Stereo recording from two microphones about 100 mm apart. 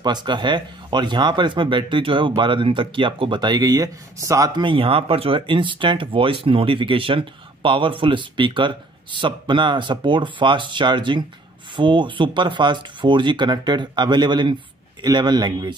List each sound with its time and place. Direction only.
0.0 s speech: 45° right (ahead or behind)
4.6 s speech: 60° right (ahead or behind)